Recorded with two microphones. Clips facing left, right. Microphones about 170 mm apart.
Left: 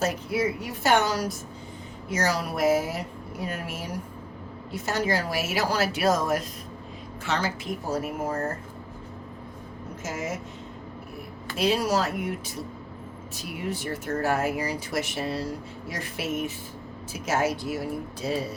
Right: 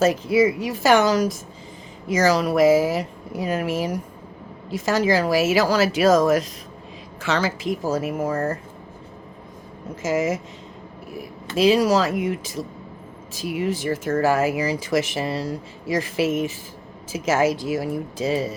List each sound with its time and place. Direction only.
0.0 s speech: 90° right
10.0 s speech: 90° right
11.5 s speech: 90° right